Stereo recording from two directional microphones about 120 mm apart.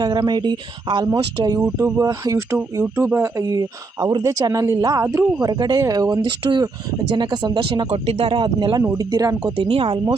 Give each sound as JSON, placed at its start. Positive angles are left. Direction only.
{"t": 0.0, "sound": "speech", "side_deg": -35}
{"t": 2.8, "sound": "speech", "side_deg": -15}
{"t": 5.0, "sound": "speech", "side_deg": -15}
{"t": 5.4, "sound": "speech", "side_deg": -35}
{"t": 7.9, "sound": "speech", "side_deg": -55}
{"t": 9.6, "sound": "speech", "side_deg": -50}